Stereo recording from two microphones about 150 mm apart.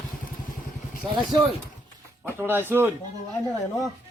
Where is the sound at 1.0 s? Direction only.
25° right (ahead or behind).